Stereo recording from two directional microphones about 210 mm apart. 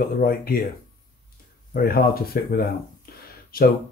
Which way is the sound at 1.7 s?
45° left (ahead or behind).